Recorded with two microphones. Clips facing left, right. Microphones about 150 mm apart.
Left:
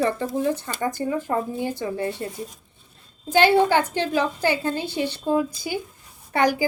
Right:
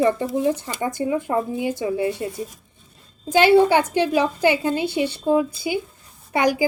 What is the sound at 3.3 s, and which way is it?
Speech, 10° right (ahead or behind).